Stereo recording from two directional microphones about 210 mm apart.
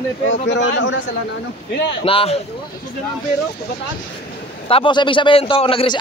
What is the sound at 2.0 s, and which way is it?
Speech, 25° left (ahead or behind).